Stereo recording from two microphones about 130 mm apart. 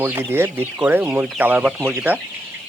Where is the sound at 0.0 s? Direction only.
15° right (ahead or behind).